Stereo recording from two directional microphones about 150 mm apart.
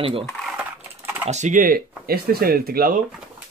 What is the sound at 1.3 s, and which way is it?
Speech, 55° right (ahead or behind).